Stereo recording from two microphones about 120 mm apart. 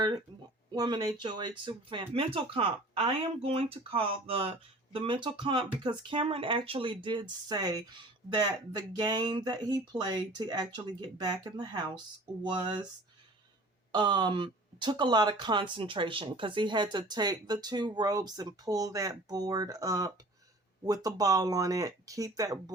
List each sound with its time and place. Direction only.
0.7 s speech: 35° right (ahead or behind)
13.9 s speech: 40° right (ahead or behind)